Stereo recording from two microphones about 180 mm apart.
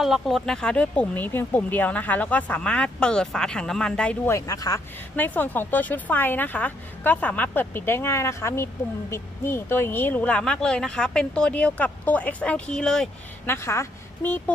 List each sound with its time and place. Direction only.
0.0 s speech: centre (ahead or behind)
4.4 s speech: 20° left (ahead or behind); by 13.5 s 5° left (ahead or behind)
13.5 s speech: 15° left (ahead or behind)